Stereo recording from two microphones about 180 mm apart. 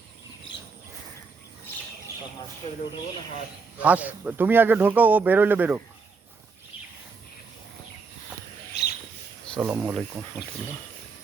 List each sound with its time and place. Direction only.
3.8 s speech: 10° right (ahead or behind)
8.7 s a sound: 65° left (ahead or behind)
9.7 s speech: 5° right (ahead or behind)